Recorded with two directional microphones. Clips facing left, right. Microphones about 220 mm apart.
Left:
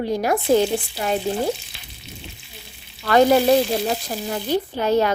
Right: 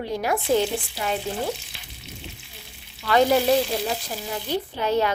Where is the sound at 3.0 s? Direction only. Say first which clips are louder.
Left 4 dB; 45° left (ahead or behind).